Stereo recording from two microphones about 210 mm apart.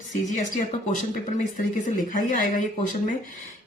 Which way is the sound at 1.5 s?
40° left (ahead or behind).